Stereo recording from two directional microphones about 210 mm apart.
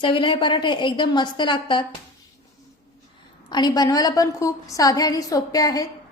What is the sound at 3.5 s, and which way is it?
A woman's voice, 20° left (ahead or behind).